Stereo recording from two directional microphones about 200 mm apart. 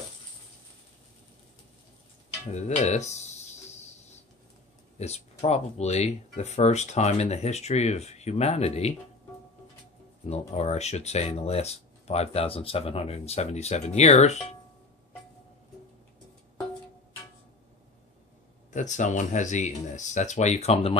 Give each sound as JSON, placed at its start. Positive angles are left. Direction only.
{"t": 2.5, "sound": "speech", "side_deg": 35}
{"t": 4.9, "sound": "speech", "side_deg": 30}
{"t": 10.2, "sound": "speech", "side_deg": 35}
{"t": 18.7, "sound": "speech", "side_deg": 40}